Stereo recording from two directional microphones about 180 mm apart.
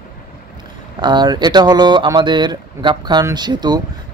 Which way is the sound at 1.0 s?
25° right (ahead or behind).